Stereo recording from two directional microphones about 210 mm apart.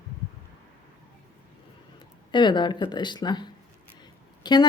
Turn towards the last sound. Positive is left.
turn(degrees=20)  # may be behind; listen again after turning